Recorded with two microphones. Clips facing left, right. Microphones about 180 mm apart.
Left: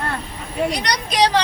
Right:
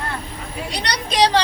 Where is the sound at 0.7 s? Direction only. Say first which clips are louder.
Left 3 dB; 30° right (ahead or behind).